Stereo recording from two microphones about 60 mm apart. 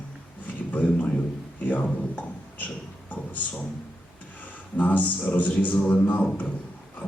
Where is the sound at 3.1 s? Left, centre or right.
Left.